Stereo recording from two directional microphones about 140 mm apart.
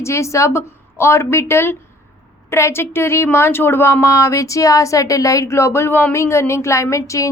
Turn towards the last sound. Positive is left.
turn(degrees=25)  # may be behind; listen again after turning